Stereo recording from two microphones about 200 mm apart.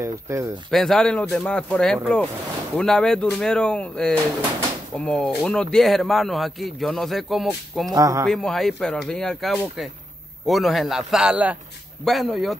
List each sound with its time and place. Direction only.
0.0 s speech: 15° right (ahead or behind)
0.7 s speech: centre (ahead or behind)
7.9 s speech: 15° right (ahead or behind)
8.3 s speech: centre (ahead or behind)